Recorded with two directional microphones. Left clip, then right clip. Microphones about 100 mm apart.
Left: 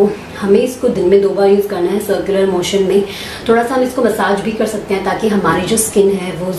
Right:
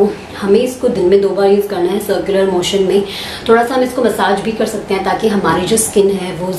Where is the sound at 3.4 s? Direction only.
15° right (ahead or behind).